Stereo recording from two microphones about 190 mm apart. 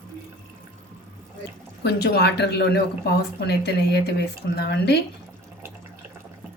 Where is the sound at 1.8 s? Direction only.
60° left (ahead or behind).